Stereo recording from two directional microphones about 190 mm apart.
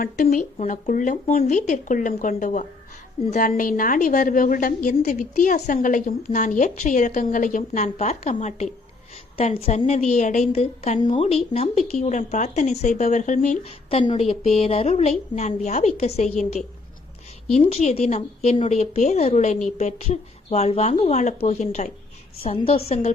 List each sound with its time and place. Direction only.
0.0 s a woman's voice: 40° left (ahead or behind)
17.5 s a woman's voice: 35° left (ahead or behind)